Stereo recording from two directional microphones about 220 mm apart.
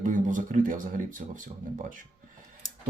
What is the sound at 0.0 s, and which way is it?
Speech, 35° right (ahead or behind).